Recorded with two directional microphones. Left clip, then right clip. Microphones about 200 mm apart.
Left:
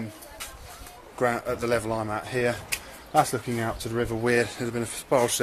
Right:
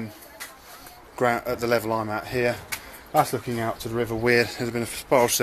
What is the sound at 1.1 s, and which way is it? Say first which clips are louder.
Speech: right 2 dB; 20° right (ahead or behind).